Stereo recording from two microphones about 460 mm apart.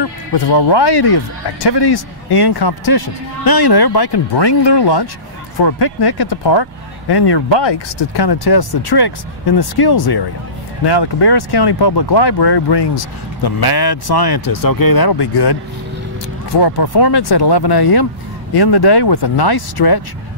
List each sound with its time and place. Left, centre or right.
0.3 s speech: left
16.6 s speech: left